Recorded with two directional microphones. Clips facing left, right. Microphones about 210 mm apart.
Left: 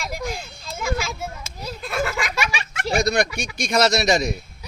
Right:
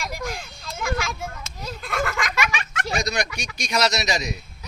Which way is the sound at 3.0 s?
55° left (ahead or behind).